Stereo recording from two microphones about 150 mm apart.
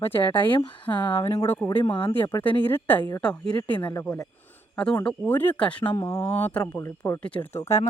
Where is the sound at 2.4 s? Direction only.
10° left (ahead or behind).